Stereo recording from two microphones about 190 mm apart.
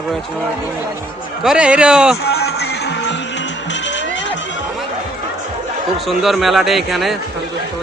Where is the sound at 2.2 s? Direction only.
60° left (ahead or behind).